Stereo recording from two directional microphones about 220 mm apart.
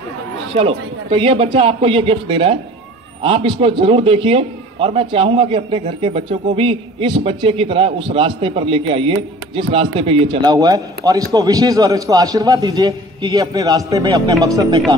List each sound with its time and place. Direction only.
0.6 s a man's voice: 25° right (ahead or behind)